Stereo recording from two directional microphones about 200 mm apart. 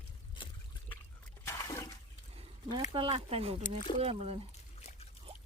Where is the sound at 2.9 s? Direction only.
25° right (ahead or behind).